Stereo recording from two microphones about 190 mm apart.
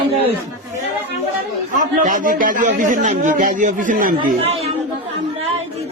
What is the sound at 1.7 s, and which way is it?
A man's voice, 40° right (ahead or behind).